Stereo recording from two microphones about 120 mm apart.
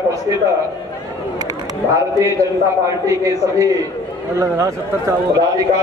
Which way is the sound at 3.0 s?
25° right (ahead or behind).